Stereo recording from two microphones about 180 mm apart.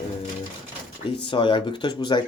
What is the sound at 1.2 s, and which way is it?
Speech, 30° left (ahead or behind).